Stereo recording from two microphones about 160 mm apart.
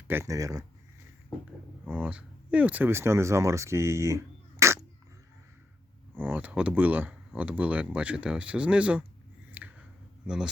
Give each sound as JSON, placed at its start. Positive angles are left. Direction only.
{"t": 0.1, "sound": "speech", "side_deg": -15}
{"t": 1.9, "sound": "speech", "side_deg": -10}
{"t": 6.1, "sound": "speech", "side_deg": -10}
{"t": 9.5, "sound": "a sound", "side_deg": -10}
{"t": 10.2, "sound": "a man's voice", "side_deg": -5}